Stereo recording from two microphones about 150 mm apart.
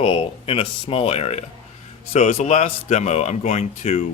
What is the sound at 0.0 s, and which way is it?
A man's voice, 40° left (ahead or behind).